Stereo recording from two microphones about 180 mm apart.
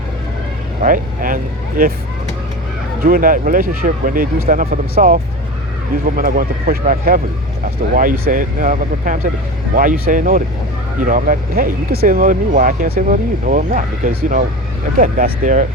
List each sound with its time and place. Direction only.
0.8 s speech: 50° right (ahead or behind)
3.0 s speech: 50° right (ahead or behind)